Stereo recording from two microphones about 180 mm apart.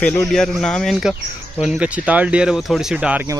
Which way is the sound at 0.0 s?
5° left (ahead or behind).